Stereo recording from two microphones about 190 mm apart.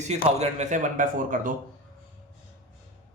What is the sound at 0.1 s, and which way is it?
Speech, 35° right (ahead or behind).